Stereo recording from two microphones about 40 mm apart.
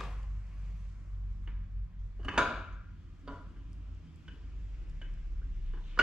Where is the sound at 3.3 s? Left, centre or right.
Centre.